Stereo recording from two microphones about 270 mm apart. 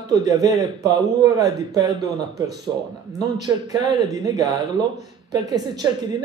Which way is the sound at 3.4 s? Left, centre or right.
Centre.